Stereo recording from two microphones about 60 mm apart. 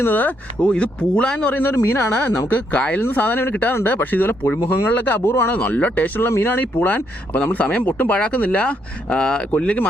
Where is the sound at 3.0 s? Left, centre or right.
Left.